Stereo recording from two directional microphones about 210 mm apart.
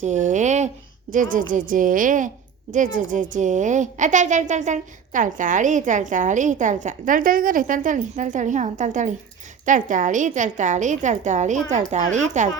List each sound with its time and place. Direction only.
0.0 s a woman's voice: 35° right (ahead or behind)